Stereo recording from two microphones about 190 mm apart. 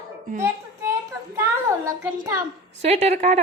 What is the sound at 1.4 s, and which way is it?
A child's voice, 15° right (ahead or behind).